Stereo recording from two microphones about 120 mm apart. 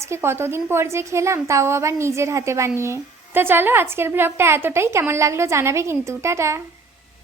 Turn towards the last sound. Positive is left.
turn(degrees=-25)  # may be behind; listen again after turning